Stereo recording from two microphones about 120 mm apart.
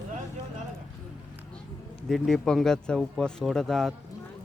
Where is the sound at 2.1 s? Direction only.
5° left (ahead or behind).